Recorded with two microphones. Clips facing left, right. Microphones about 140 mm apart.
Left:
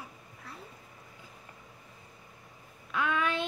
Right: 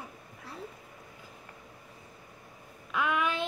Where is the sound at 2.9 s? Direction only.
15° right (ahead or behind).